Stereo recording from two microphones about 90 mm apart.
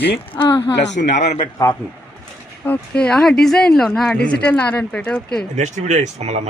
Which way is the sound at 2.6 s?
15° left (ahead or behind).